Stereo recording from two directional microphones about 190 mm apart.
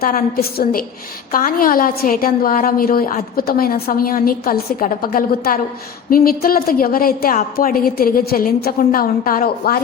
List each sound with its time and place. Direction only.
0.0 s a woman's voice: 50° left (ahead or behind)